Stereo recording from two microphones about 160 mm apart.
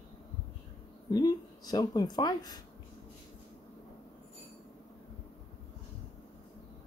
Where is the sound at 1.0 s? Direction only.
25° left (ahead or behind).